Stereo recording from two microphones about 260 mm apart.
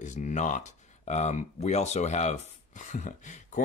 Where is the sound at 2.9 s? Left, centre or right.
Left.